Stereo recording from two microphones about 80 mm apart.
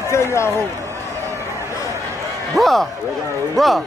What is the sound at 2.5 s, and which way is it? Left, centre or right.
Speech, centre.